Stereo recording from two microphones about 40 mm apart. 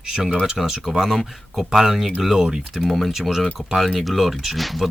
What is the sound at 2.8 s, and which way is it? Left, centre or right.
Speech, centre.